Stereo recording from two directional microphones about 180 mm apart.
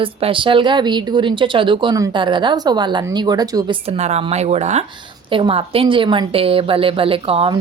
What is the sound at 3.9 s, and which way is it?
A woman's voice, 35° right (ahead or behind).